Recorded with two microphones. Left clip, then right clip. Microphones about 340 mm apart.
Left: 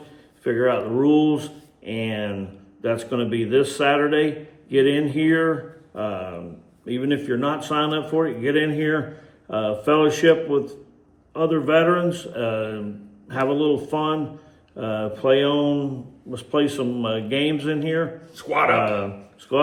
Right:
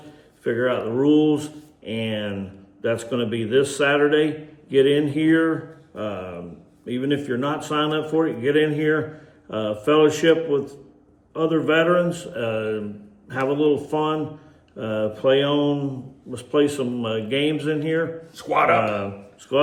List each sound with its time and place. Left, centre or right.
0.4 s speech: centre
18.3 s speech: centre